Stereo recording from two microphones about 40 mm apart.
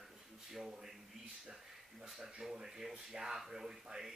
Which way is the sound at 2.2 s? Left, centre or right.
Centre.